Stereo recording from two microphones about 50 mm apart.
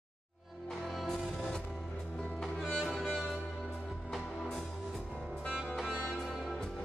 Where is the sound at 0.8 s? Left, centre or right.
Centre.